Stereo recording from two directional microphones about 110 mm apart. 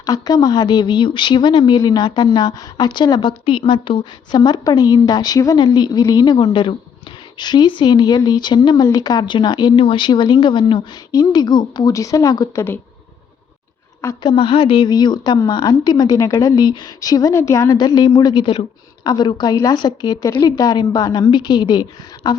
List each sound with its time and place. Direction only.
0.0 s a woman's voice: 35° left (ahead or behind)
9.7 s speech: 55° left (ahead or behind)
11.1 s a woman's voice: 35° left (ahead or behind)
14.2 s a woman's voice: 45° left (ahead or behind)